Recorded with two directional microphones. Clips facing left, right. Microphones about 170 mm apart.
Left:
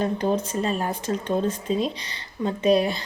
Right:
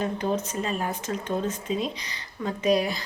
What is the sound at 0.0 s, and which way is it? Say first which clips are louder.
Speech: left 3 dB; 30° left (ahead or behind).